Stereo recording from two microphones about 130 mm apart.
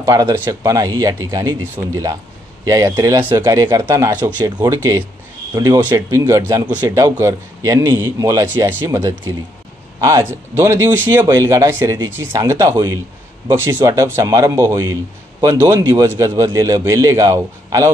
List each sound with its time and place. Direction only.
0.0 s speech: 30° right (ahead or behind)
4.7 s speech: 20° right (ahead or behind)
5.5 s speech: 30° right (ahead or behind)
9.9 s speech: 25° right (ahead or behind)